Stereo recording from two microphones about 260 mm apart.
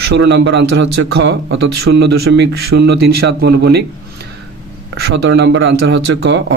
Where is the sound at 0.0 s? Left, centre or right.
Right.